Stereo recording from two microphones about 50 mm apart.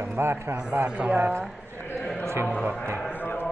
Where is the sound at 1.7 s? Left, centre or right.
Left.